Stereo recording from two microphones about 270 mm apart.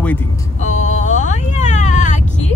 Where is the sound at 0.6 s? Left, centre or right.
Left.